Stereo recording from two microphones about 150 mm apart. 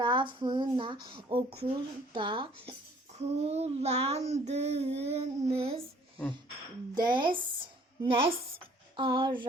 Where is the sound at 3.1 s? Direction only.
45° right (ahead or behind).